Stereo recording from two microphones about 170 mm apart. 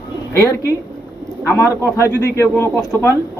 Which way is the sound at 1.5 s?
15° left (ahead or behind).